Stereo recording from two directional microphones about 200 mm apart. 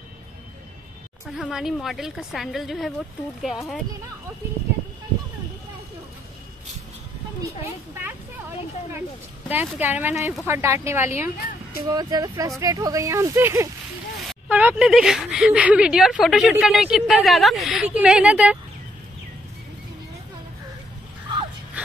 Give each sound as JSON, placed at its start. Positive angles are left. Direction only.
{"t": 1.2, "sound": "speech", "side_deg": 0}
{"t": 9.5, "sound": "speech", "side_deg": -10}